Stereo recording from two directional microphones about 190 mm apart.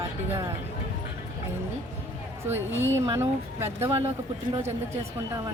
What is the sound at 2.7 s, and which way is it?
Speech, 80° right.